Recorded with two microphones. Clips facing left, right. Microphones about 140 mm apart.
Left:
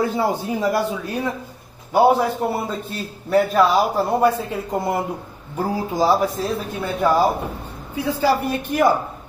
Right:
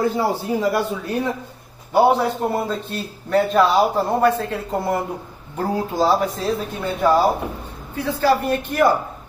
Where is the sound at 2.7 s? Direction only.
10° left (ahead or behind).